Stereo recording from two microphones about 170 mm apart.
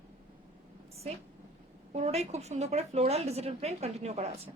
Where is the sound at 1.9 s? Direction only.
40° right (ahead or behind).